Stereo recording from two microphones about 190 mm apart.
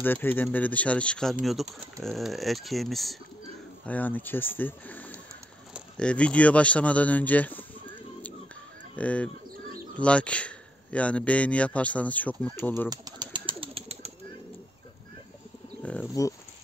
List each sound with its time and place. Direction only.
0.0 s a man's voice: 10° left (ahead or behind)
8.9 s a man's voice: 5° left (ahead or behind)
12.9 s bird: 20° right (ahead or behind)
15.8 s bird: 5° left (ahead or behind)